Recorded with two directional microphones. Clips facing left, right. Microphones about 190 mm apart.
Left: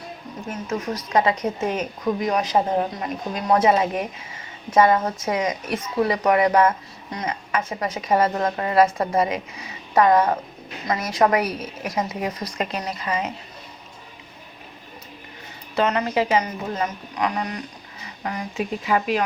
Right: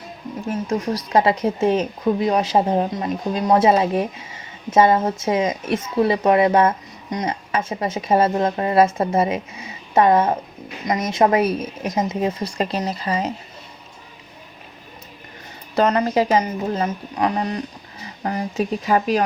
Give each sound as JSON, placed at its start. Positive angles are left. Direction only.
{"t": 0.7, "sound": "speech", "side_deg": -35}
{"t": 15.7, "sound": "a woman's voice", "side_deg": -40}